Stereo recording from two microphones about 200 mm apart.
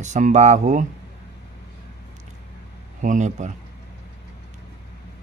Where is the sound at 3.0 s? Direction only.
40° right (ahead or behind).